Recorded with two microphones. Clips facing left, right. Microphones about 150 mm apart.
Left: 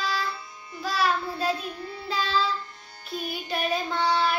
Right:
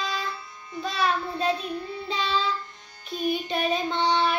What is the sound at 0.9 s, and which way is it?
Music, 20° right (ahead or behind).